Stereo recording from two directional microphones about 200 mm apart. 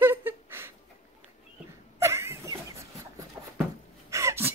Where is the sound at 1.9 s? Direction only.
15° right (ahead or behind).